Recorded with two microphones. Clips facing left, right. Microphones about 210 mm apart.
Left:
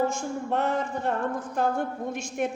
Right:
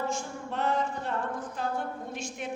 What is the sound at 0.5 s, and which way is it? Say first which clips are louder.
A woman's voice: left 2 dB; 55° left (ahead or behind).